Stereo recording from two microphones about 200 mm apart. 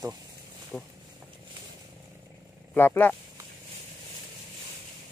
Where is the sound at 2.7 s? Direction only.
10° left (ahead or behind).